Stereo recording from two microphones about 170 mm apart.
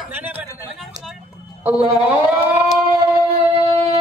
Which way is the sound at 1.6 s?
10° right (ahead or behind).